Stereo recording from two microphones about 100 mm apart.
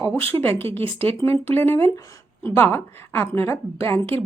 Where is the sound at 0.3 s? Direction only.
20° left (ahead or behind).